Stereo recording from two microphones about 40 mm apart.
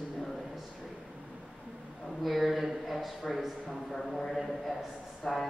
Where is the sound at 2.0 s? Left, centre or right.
Centre.